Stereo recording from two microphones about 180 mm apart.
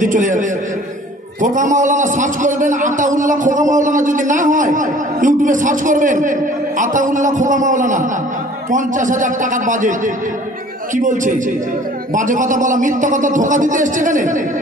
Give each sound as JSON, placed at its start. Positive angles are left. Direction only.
{"t": 0.0, "sound": "a man's voice", "side_deg": -45}